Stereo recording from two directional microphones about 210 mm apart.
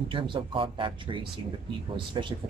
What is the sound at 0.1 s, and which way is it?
Speech, 25° right (ahead or behind).